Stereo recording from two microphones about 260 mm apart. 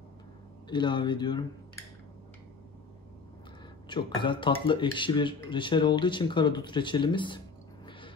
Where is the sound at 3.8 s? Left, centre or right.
Centre.